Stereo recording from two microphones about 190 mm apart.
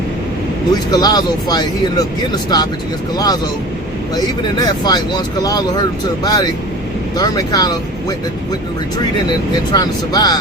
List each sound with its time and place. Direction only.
0.7 s a man's voice: 20° left (ahead or behind)
4.6 s a man's voice: 20° left (ahead or behind)
9.7 s a man's voice: 20° left (ahead or behind)